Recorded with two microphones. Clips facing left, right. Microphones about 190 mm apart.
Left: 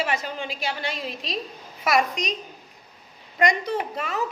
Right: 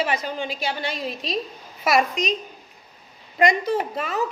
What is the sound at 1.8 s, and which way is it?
Speech, 25° right (ahead or behind).